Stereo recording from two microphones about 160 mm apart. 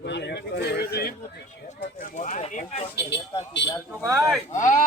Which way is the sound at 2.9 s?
90° left.